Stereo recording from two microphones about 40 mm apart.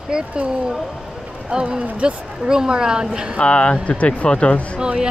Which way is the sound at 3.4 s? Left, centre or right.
Left.